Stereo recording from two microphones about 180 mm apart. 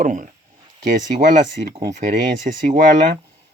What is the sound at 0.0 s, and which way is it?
Speech, 50° right (ahead or behind).